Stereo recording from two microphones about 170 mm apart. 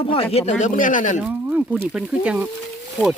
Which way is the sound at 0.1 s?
35° left (ahead or behind).